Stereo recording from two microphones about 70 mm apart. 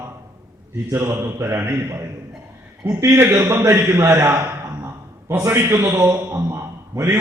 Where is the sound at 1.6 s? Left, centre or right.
Right.